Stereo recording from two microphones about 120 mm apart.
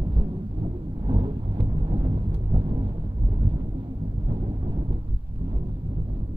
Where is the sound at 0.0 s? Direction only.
45° right (ahead or behind).